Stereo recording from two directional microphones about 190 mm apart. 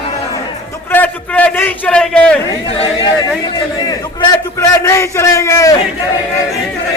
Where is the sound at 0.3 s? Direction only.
15° left (ahead or behind).